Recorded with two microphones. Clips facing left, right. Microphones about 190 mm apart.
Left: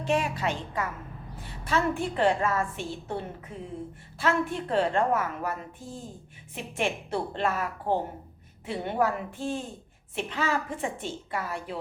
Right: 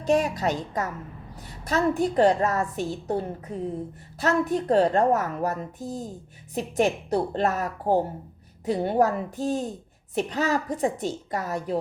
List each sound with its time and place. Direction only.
0.0 s a woman's voice: 40° right (ahead or behind)